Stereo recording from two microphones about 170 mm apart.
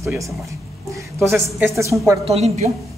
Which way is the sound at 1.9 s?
5° right (ahead or behind).